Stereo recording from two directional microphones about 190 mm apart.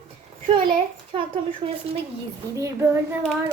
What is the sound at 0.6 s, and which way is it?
A child's voice, 25° right (ahead or behind).